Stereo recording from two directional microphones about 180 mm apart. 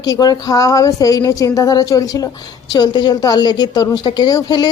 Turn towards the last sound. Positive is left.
turn(degrees=25)  # may be behind; listen again after turning